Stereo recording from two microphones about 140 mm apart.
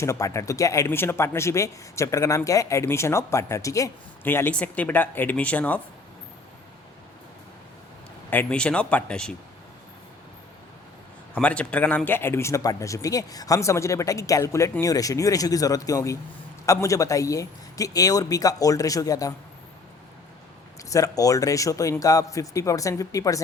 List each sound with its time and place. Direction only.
0.0 s speech: 20° left (ahead or behind)
8.3 s speech: 10° left (ahead or behind)
11.3 s speech: 10° left (ahead or behind); by 19.3 s 25° left (ahead or behind)
20.9 s speech: 25° left (ahead or behind)